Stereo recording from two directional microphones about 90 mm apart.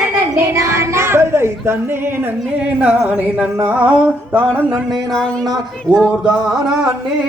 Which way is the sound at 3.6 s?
15° right (ahead or behind).